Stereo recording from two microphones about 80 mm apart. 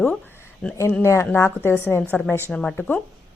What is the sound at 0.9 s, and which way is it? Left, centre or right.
A woman's voice, left.